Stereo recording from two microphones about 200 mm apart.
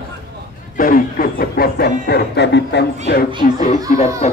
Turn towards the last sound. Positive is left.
turn(degrees=30)  # may be behind; listen again after turning